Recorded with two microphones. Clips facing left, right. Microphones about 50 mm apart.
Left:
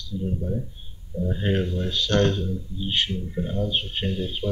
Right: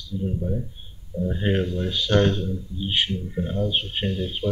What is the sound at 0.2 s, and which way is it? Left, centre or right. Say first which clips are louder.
Speech: right 1 dB; centre.